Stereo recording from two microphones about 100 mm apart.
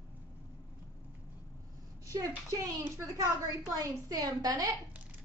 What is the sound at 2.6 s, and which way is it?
A woman's voice, 35° right (ahead or behind).